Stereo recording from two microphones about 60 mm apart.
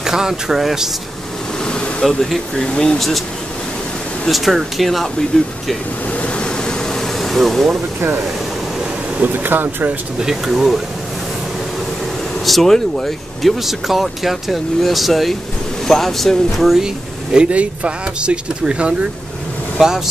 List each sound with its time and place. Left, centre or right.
0.0 s speech: centre
1.7 s speech: centre
3.0 s speech: centre
4.3 s speech: centre
6.2 s vehicle: centre
9.2 s speech: right
10.1 s speech: centre
12.4 s speech: centre